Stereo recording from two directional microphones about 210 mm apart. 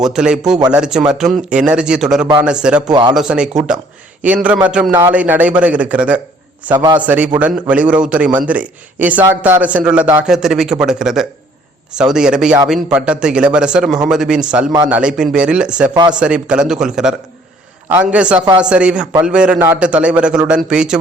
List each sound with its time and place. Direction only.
0.1 s a man's voice: 5° right (ahead or behind)
2.9 s speech: 20° right (ahead or behind)
3.2 s a man's voice: 5° right (ahead or behind)